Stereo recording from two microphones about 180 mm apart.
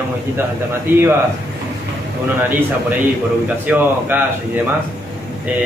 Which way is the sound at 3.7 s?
10° right (ahead or behind).